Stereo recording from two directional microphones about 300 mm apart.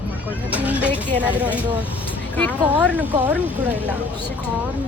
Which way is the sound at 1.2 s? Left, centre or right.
Centre.